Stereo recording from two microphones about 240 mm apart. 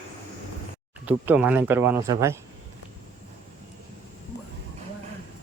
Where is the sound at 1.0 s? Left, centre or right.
Centre.